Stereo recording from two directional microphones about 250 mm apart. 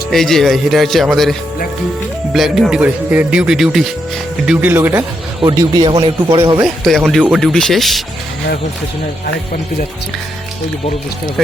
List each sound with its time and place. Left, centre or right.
0.1 s speech: centre
6.8 s speech: centre